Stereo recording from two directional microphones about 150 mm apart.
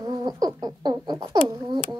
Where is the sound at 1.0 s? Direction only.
25° right (ahead or behind).